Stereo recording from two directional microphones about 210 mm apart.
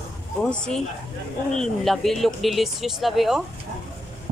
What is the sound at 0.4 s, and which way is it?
Speech, 5° left (ahead or behind).